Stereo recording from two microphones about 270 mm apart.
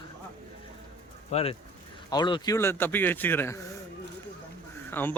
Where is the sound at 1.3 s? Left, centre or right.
Left.